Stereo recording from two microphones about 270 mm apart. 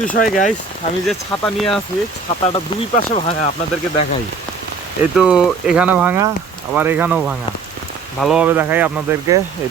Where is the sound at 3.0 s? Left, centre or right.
Left.